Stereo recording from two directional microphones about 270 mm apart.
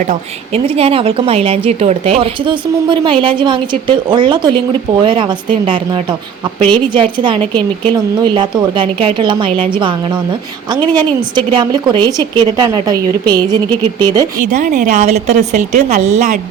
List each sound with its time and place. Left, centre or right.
0.1 s a woman's voice: right
14.3 s a woman's voice: right